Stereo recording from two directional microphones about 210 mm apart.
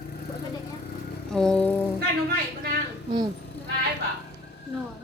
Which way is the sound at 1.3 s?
5° left (ahead or behind).